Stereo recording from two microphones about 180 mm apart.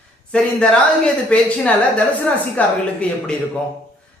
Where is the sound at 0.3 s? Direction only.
5° left (ahead or behind).